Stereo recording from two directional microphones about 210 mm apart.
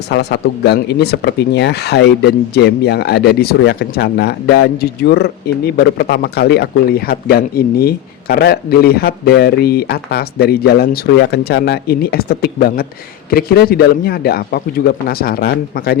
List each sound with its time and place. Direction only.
0.1 s speech: 50° left (ahead or behind)